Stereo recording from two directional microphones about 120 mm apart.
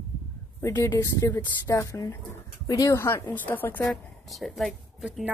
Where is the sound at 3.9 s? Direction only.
Centre (ahead or behind).